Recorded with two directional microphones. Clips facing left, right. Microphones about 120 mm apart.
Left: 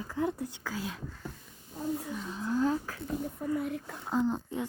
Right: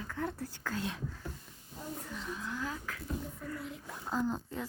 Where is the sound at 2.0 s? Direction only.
10° left (ahead or behind).